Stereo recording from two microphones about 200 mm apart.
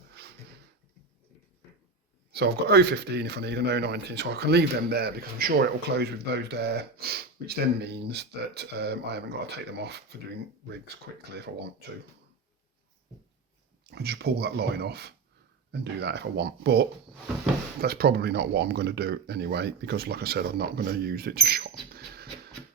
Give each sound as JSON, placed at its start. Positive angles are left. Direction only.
{"t": 2.3, "sound": "speech", "side_deg": -55}
{"t": 11.3, "sound": "speech", "side_deg": -55}
{"t": 13.8, "sound": "speech", "side_deg": -55}